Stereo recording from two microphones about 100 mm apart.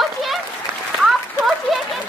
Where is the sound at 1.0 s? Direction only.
Centre (ahead or behind).